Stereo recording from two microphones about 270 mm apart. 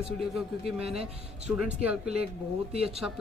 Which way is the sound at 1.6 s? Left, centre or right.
Centre.